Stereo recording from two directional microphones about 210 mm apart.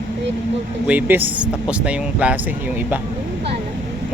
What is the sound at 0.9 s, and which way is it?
Speech, 10° right (ahead or behind).